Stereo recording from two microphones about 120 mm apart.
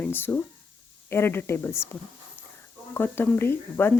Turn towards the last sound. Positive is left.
turn(degrees=20)  # may be behind; listen again after turning